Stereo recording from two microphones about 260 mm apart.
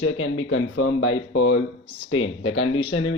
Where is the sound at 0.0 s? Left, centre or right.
Left.